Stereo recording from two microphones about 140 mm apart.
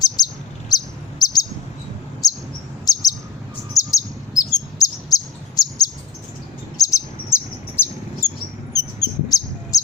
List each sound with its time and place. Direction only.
0.2 s bird: 30° left (ahead or behind)
3.8 s chirp: 25° left (ahead or behind)
6.7 s bird: 25° left (ahead or behind)
8.7 s a sound: 25° left (ahead or behind)